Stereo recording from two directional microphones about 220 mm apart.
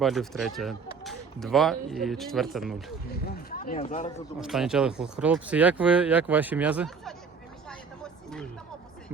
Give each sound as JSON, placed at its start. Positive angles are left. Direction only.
{"t": 0.0, "sound": "speech", "side_deg": 0}
{"t": 3.2, "sound": "speech", "side_deg": 40}
{"t": 4.4, "sound": "speech", "side_deg": 0}
{"t": 7.7, "sound": "vehicle", "side_deg": 5}